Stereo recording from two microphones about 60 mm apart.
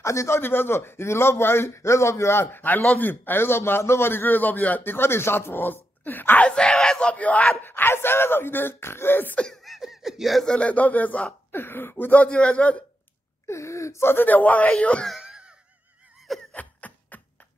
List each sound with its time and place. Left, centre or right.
0.0 s speech: left
0.4 s a man's voice: left
6.4 s crowd: centre
7.6 s a man's voice: left
9.4 s laughter: centre
10.4 s speech: centre
11.5 s a man's voice: left
12.1 s speech: left
13.5 s speech: left
14.1 s speech: left
14.7 s crowd: centre
15.0 s wail: centre
16.5 s a sound: left